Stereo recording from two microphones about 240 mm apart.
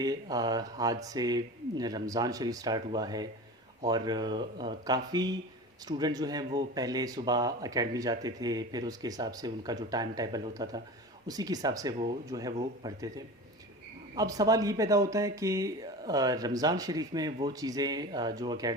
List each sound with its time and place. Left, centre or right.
0.0 s speech: centre